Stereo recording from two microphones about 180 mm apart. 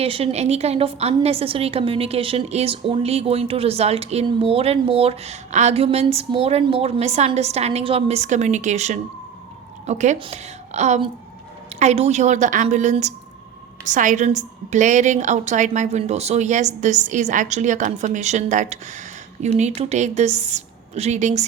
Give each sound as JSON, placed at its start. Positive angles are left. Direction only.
{"t": 0.0, "sound": "a woman's voice", "side_deg": -30}